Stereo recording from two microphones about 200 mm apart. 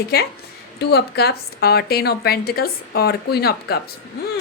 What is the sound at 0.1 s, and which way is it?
A woman's voice, 50° left (ahead or behind).